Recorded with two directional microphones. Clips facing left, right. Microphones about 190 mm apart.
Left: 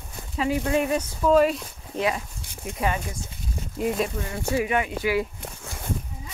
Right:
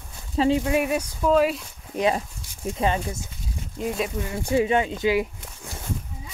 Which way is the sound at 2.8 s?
25° right (ahead or behind).